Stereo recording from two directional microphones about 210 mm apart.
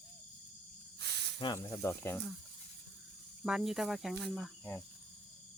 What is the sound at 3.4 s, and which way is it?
Cricket, centre (ahead or behind).